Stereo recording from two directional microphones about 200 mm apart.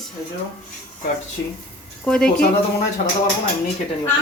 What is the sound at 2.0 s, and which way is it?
Speech, 5° left (ahead or behind).